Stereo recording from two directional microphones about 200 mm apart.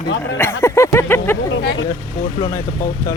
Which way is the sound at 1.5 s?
65° left (ahead or behind).